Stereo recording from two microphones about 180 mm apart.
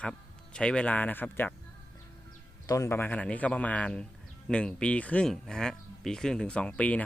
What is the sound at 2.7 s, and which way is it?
Speech, 15° left (ahead or behind).